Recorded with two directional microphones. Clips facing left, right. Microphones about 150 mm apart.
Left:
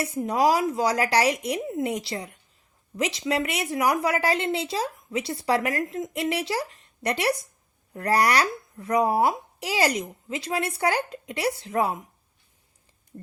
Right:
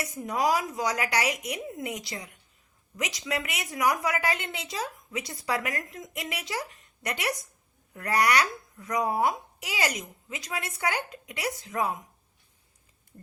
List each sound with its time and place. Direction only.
0.0 s a woman's voice: 30° left (ahead or behind)